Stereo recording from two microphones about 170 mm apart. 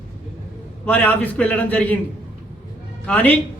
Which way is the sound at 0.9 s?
10° left (ahead or behind).